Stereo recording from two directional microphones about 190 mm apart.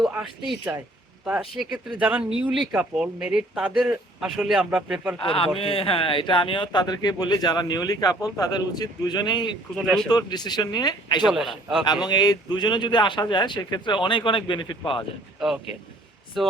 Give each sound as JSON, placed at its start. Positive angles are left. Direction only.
{"t": 0.0, "sound": "speech", "side_deg": 0}
{"t": 5.2, "sound": "a man's voice", "side_deg": 30}
{"t": 9.7, "sound": "speech", "side_deg": 0}
{"t": 10.1, "sound": "a man's voice", "side_deg": 20}
{"t": 11.3, "sound": "speech", "side_deg": 0}
{"t": 12.0, "sound": "a man's voice", "side_deg": 20}
{"t": 16.4, "sound": "speech", "side_deg": 0}